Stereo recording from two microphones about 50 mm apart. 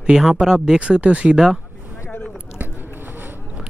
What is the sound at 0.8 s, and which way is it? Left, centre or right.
Speech, right.